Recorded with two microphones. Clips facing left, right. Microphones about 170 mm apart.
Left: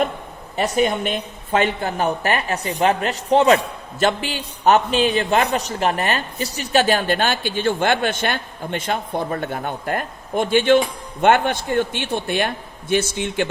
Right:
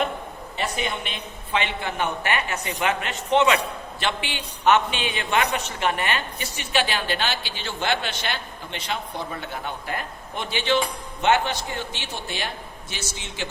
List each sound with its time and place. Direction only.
0.5 s a woman's voice: 45° left (ahead or behind)